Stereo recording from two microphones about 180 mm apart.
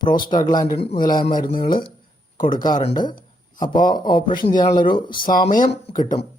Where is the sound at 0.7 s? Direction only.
35° left (ahead or behind).